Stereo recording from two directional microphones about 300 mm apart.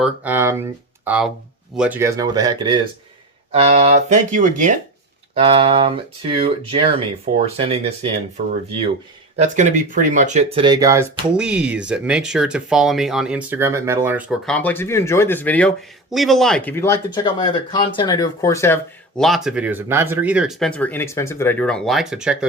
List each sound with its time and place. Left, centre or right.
0.0 s speech: centre
9.4 s speech: right; by 22.4 s centre